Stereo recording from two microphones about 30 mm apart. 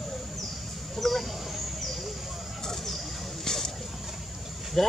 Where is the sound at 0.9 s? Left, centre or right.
Centre.